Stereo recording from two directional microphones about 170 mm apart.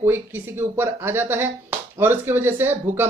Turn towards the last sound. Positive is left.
turn(degrees=-15)  # may be behind; listen again after turning